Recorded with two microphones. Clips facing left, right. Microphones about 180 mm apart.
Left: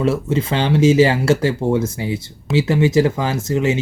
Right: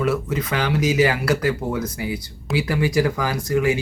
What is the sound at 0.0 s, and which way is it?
Speech, 25° left (ahead or behind).